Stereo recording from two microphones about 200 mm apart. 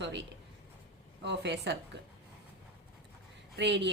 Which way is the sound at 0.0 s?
60° right (ahead or behind).